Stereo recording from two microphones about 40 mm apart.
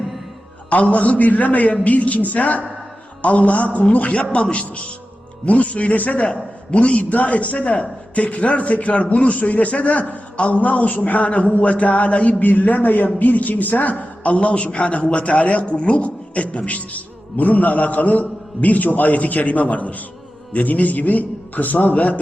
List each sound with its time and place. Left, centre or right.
0.7 s a man's voice: left